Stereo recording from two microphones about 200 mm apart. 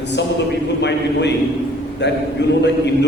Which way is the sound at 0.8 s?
60° left (ahead or behind).